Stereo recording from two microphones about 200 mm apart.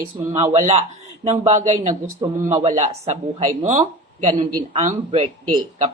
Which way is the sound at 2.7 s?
30° right (ahead or behind).